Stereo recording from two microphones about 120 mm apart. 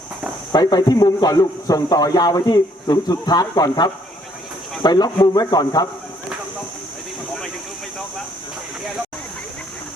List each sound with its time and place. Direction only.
0.5 s a man's voice: 35° left (ahead or behind)